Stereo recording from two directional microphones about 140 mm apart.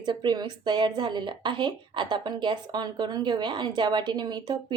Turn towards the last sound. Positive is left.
turn(degrees=-30)  # may be behind; listen again after turning